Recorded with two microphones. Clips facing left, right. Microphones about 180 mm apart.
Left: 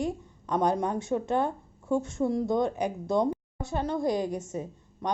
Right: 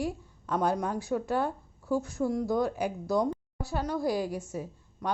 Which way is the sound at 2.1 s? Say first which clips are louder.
Left 2 dB; 25° left (ahead or behind).